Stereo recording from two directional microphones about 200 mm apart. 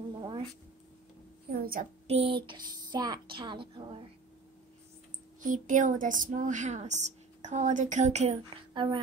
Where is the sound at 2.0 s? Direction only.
30° right (ahead or behind).